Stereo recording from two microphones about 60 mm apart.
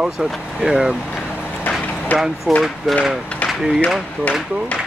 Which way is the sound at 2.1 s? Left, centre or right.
Left.